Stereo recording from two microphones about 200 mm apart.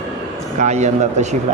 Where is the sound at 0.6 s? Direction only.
35° right (ahead or behind).